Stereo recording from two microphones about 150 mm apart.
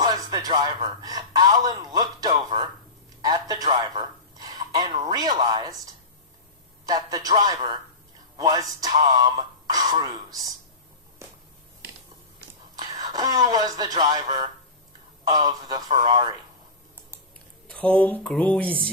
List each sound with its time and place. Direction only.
0.0 s a man's voice: 25° right (ahead or behind)
6.8 s speech: 25° right (ahead or behind)
12.7 s a woman's voice: 25° right (ahead or behind)
17.7 s speech: 10° left (ahead or behind)